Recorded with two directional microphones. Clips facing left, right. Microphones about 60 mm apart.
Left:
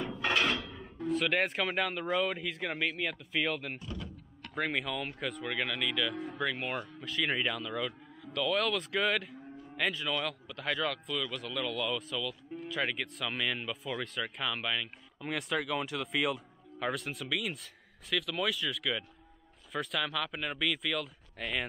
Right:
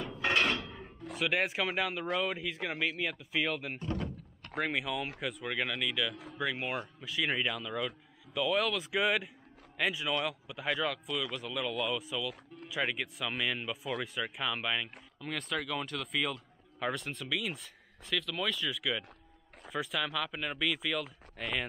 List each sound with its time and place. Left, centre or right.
0.6 s a sound: right
1.1 s a man's voice: centre
3.8 s speech: right
4.6 s a man's voice: centre
15.1 s a man's voice: centre